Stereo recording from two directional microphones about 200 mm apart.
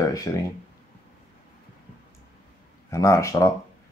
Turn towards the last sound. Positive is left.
turn(degrees=15)  # may be behind; listen again after turning